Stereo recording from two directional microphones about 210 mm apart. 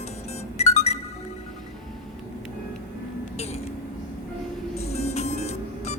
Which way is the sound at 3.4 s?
30° left (ahead or behind).